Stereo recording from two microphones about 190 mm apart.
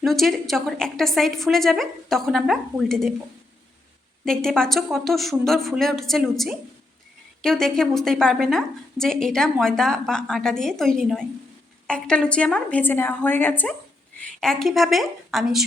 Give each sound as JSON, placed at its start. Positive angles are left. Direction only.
{"t": 0.0, "sound": "a woman's voice", "side_deg": 0}
{"t": 4.3, "sound": "a woman's voice", "side_deg": 5}